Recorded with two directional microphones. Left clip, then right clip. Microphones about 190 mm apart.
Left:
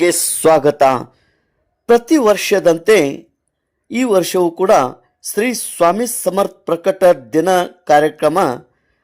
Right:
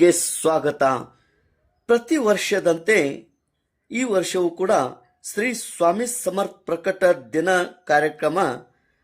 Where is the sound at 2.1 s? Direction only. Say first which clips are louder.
Left 7 dB; 35° left (ahead or behind).